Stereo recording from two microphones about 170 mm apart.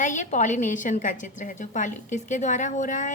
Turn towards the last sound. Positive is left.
turn(degrees=50)  # may be behind; listen again after turning